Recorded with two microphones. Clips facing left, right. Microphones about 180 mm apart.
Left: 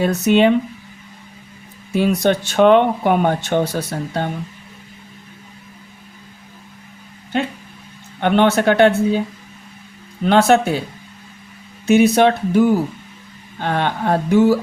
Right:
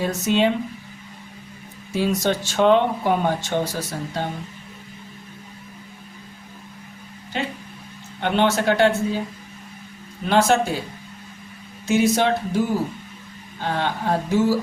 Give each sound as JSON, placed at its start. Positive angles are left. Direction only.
{"t": 0.0, "sound": "speech", "side_deg": 65}
{"t": 1.9, "sound": "speech", "side_deg": 60}
{"t": 8.2, "sound": "speech", "side_deg": 60}
{"t": 10.2, "sound": "speech", "side_deg": 65}
{"t": 11.9, "sound": "speech", "side_deg": 65}